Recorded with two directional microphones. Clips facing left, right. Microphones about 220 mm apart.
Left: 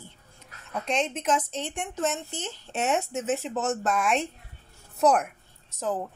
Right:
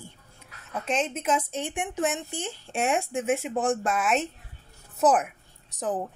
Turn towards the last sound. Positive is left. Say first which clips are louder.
# even
turn(degrees=-20)  # may be behind; listen again after turning